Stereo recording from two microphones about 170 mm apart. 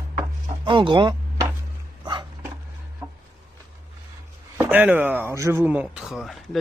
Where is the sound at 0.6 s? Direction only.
30° right (ahead or behind).